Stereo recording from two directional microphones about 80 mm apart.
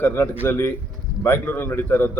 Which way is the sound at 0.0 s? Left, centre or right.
Left.